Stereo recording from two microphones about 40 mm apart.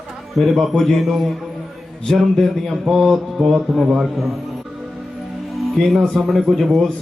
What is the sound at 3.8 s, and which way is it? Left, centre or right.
Speech, centre.